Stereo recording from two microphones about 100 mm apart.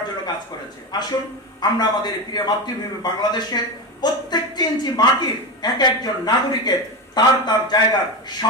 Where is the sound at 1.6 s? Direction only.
45° left (ahead or behind).